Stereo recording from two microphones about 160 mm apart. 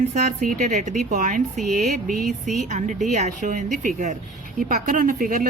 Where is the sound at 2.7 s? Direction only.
50° right (ahead or behind).